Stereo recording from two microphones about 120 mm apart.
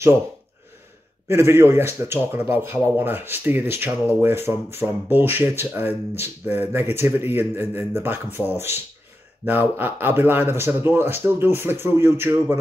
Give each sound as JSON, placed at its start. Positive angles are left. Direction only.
{"t": 1.2, "sound": "speech", "side_deg": -20}